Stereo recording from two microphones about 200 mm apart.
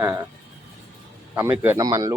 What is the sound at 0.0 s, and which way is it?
Speech, 10° right (ahead or behind).